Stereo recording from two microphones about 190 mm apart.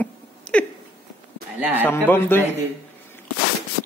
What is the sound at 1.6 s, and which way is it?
Speech, 10° right (ahead or behind).